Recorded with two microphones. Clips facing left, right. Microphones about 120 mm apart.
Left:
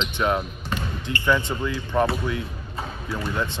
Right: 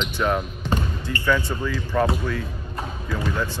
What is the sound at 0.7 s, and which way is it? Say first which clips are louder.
Basketball bounce: right 4 dB; 30° right (ahead or behind).